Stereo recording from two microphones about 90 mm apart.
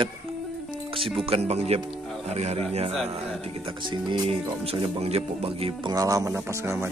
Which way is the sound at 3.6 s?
65° right (ahead or behind).